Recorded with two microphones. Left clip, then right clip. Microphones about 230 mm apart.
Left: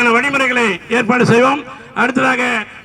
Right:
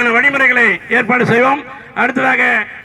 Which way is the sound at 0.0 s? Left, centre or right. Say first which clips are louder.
Right 2 dB; left.